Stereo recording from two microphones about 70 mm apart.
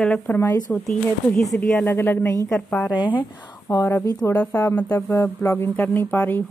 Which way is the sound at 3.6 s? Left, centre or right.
Left.